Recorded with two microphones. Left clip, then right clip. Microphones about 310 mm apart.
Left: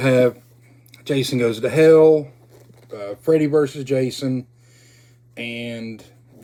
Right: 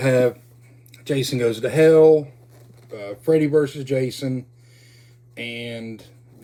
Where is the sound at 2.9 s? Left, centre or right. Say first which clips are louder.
Left 2 dB; centre.